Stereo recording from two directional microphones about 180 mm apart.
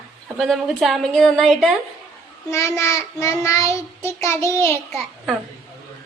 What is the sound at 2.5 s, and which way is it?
Child singing, 15° left (ahead or behind).